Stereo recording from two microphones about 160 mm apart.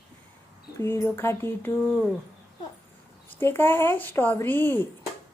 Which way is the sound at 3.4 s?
15° left (ahead or behind).